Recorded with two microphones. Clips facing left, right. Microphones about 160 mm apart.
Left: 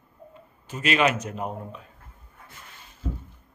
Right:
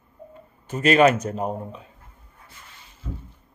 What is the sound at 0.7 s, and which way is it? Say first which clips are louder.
A man's voice: right 6 dB; 45° right (ahead or behind).